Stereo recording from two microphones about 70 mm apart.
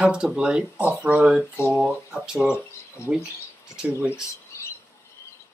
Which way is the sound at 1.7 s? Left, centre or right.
Centre.